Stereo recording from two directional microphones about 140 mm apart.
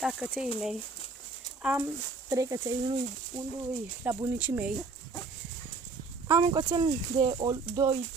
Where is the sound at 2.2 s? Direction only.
25° right (ahead or behind).